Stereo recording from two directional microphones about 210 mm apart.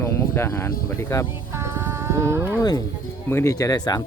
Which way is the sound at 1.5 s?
10° right (ahead or behind).